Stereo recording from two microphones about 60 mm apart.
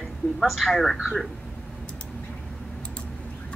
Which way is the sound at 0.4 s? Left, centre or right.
Centre.